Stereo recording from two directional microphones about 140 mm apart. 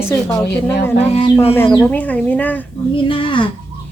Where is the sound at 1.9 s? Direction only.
10° left (ahead or behind).